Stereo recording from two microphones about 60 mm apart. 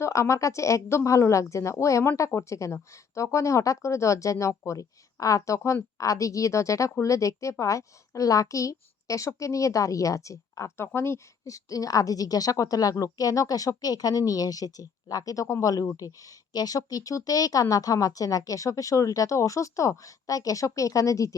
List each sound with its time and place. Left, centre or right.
0.0 s speech: left
10.8 s speech: left
11.4 s a woman's voice: left